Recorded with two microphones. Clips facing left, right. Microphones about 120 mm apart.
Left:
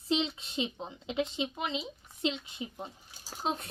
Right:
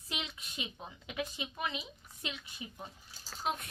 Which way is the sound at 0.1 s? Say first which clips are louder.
Left 12 dB; 30° left (ahead or behind).